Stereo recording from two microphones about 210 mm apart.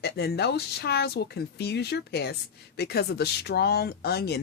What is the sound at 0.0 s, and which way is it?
A woman's voice, 50° left (ahead or behind).